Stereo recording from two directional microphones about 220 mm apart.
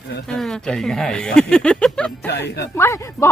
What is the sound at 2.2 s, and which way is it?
Speech, 50° left (ahead or behind).